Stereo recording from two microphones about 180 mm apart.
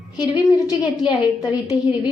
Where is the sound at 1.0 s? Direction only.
25° left (ahead or behind).